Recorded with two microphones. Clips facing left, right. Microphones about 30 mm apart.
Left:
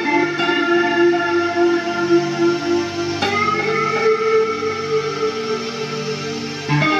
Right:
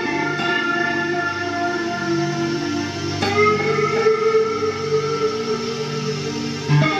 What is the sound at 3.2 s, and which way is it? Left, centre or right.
Music, centre.